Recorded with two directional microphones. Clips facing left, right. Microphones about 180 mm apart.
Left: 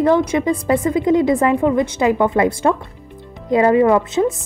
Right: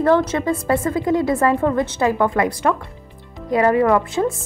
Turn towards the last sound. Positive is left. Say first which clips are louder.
# left 2 dB
turn(degrees=20)  # may be behind; listen again after turning